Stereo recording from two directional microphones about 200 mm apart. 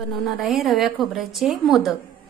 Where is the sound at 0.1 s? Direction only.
Centre (ahead or behind).